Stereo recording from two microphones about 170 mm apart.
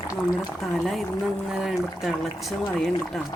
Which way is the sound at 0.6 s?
Centre (ahead or behind).